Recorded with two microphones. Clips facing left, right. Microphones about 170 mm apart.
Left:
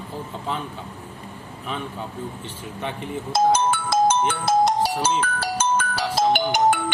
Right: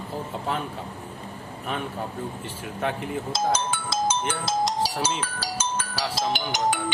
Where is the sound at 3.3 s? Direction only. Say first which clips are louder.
Left 8 dB; 60° left (ahead or behind).